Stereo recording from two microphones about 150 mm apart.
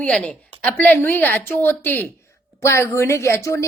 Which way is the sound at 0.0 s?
5° left (ahead or behind).